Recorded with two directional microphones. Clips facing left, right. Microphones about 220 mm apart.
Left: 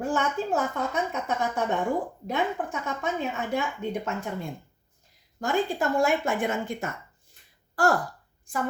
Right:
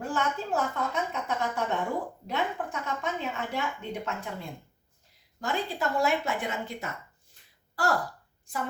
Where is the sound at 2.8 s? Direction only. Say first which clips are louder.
Left 3 dB; 45° left (ahead or behind).